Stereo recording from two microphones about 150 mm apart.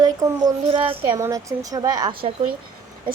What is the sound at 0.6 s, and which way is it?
Speech, 35° right (ahead or behind).